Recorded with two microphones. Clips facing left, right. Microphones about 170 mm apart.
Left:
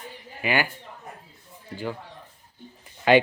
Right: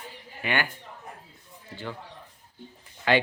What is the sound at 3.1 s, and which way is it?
Cough, 15° left (ahead or behind).